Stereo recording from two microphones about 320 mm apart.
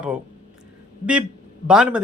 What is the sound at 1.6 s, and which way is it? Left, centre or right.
Speech, centre.